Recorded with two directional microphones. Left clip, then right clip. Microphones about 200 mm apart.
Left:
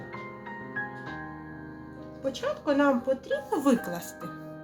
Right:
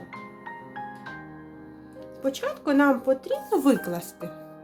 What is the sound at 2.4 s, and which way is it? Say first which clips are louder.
Speech: right 2 dB; 65° right (ahead or behind).